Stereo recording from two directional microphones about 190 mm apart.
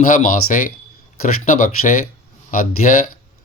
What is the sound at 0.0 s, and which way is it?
Speech, 45° left (ahead or behind).